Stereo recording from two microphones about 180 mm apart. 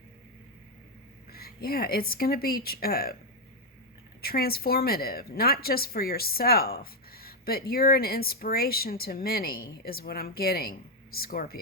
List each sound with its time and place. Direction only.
1.3 s a woman's voice: 60° left (ahead or behind)
4.2 s a woman's voice: 60° left (ahead or behind)